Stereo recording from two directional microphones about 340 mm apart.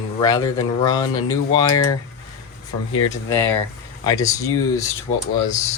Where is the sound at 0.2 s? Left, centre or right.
Centre.